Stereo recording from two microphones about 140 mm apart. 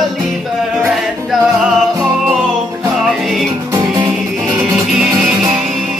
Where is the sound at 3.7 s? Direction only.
15° right (ahead or behind).